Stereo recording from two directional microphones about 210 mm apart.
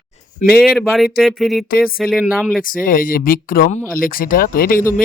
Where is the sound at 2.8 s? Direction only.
40° left (ahead or behind).